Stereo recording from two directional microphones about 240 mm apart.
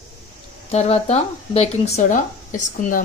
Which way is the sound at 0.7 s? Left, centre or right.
Left.